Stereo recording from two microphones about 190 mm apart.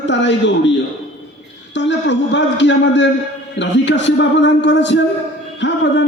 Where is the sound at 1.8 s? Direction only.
70° left (ahead or behind).